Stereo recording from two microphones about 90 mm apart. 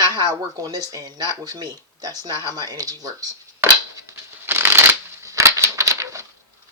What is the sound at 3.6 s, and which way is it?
Shuffling cards, 30° right (ahead or behind).